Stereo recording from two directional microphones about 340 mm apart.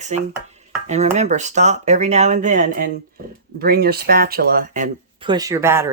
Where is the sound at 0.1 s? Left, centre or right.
Centre.